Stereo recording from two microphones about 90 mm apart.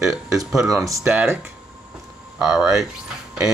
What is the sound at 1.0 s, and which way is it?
Speech, 15° right (ahead or behind).